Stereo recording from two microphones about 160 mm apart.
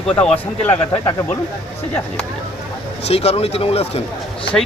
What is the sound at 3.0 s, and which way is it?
Speech, 40° left (ahead or behind).